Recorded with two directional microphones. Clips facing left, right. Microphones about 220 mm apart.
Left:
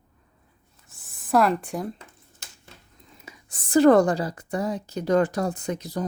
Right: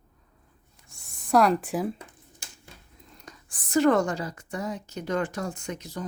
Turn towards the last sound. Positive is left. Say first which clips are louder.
# left 6 dB
turn(degrees=35)  # may be behind; listen again after turning